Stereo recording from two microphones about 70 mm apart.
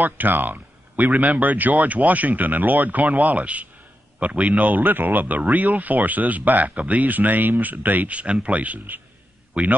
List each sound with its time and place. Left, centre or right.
0.0 s a man's voice: right